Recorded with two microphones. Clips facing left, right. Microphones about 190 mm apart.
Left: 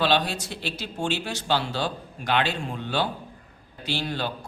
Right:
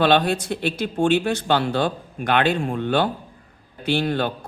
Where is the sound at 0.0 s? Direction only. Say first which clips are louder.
Right 6 dB; 55° right (ahead or behind).